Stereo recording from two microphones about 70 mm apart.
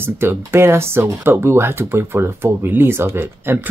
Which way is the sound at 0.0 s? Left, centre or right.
Right.